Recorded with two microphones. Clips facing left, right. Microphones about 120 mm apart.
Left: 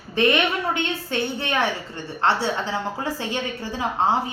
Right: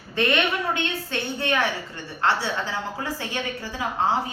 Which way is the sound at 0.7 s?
20° left (ahead or behind).